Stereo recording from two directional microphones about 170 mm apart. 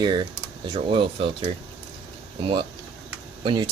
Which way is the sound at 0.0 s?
25° right (ahead or behind).